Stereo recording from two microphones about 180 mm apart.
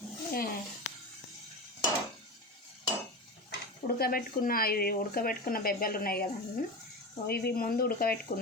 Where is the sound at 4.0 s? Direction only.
55° left (ahead or behind).